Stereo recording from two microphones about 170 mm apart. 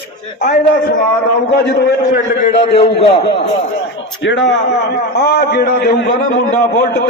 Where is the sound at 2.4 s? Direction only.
40° left (ahead or behind).